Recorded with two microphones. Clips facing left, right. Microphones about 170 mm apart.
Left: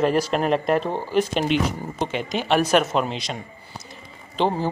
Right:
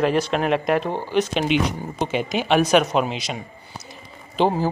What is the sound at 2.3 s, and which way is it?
A man's voice, centre (ahead or behind).